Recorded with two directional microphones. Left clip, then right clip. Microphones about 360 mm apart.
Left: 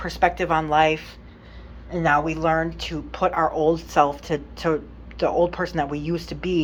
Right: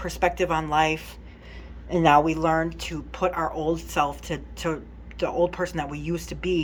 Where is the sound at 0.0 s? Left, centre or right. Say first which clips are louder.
Left 3 dB; centre.